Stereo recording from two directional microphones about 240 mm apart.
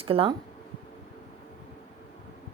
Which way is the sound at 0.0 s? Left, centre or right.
Right.